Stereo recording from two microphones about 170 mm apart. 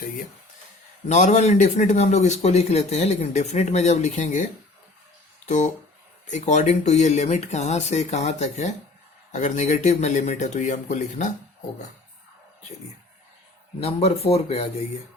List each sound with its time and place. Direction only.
1.0 s speech: 45° left (ahead or behind)
5.5 s speech: 45° left (ahead or behind)
13.7 s speech: 35° left (ahead or behind)